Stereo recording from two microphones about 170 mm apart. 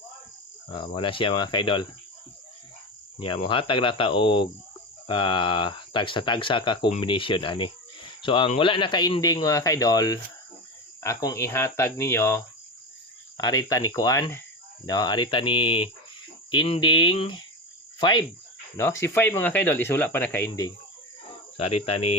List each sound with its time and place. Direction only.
0.7 s speech: 30° left (ahead or behind)
3.2 s speech: 30° left (ahead or behind)
18.8 s speech: 15° left (ahead or behind)
20.5 s speech: 25° left (ahead or behind)
21.6 s speech: 35° left (ahead or behind)